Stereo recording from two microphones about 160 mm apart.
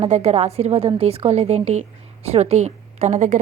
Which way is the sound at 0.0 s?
40° right (ahead or behind).